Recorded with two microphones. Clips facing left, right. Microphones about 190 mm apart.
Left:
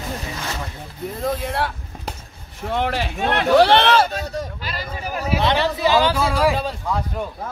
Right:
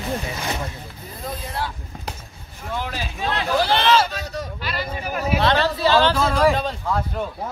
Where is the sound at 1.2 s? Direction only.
70° left (ahead or behind).